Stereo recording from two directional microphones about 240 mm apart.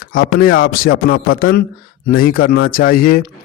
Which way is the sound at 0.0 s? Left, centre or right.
Left.